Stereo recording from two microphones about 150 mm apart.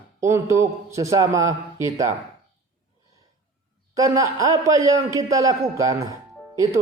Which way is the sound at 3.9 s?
20° right (ahead or behind).